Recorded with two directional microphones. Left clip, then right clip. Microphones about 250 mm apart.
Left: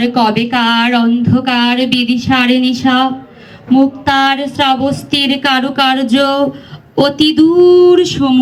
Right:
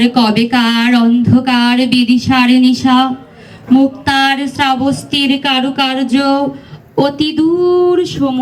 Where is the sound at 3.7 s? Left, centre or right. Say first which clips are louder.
Even; centre.